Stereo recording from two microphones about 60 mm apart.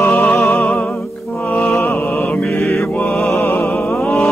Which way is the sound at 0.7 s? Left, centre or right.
Left.